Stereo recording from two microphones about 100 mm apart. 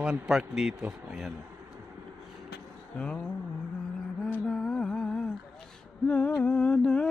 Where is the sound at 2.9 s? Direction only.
10° left (ahead or behind).